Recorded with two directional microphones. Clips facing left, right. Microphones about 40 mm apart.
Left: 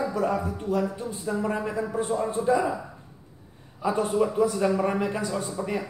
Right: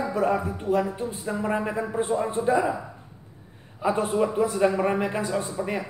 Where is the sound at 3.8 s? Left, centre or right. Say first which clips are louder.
Right 1 dB; right.